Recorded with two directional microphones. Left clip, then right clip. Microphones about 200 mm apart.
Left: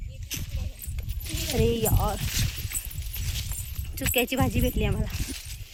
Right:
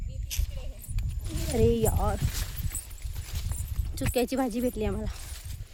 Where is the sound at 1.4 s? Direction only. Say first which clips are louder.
Right 1 dB; 5° right (ahead or behind).